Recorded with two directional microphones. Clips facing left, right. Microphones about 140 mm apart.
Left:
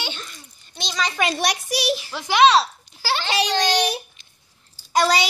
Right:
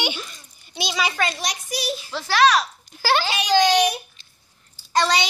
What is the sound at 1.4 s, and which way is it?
Speech, 70° left (ahead or behind).